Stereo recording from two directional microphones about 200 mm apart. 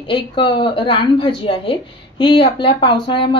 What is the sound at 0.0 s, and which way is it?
A woman's voice, 25° left (ahead or behind).